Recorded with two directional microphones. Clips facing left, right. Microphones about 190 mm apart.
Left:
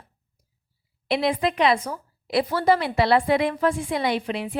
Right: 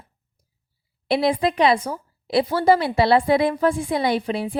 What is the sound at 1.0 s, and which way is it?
Speech, 35° right (ahead or behind).